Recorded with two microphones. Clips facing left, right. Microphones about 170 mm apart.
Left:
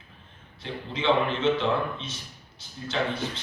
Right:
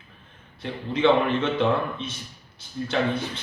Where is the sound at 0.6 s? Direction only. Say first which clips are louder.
Right 6 dB; 55° right (ahead or behind).